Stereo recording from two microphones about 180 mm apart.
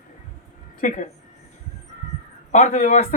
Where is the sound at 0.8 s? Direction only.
45° left (ahead or behind).